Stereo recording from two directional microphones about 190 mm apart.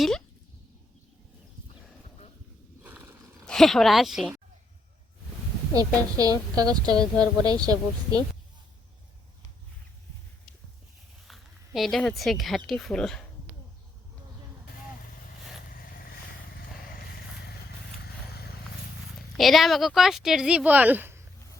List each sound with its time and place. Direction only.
2.8 s a sound: 10° right (ahead or behind)
3.4 s speech: centre (ahead or behind)
5.7 s a woman's voice: 20° right (ahead or behind)
11.3 s speech: centre (ahead or behind)
15.7 s vehicle: 50° left (ahead or behind)
17.9 s vehicle: 55° left (ahead or behind)
19.4 s speech: centre (ahead or behind)